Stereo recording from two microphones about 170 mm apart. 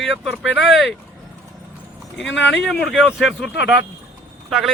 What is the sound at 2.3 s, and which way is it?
Speech, 90° left.